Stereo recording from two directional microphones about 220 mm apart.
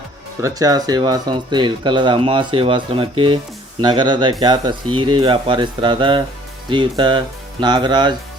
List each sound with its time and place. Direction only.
0.4 s speech: 15° right (ahead or behind)